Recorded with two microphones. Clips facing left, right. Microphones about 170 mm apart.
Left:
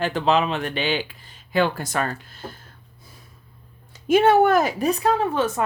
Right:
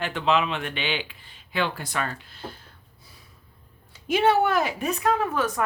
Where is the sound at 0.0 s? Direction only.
35° left (ahead or behind).